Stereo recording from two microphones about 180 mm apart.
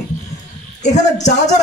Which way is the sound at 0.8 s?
40° left (ahead or behind).